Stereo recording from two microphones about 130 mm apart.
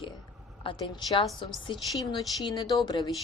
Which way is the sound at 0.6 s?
40° left (ahead or behind).